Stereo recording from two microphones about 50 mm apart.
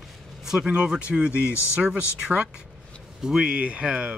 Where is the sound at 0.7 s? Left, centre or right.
Right.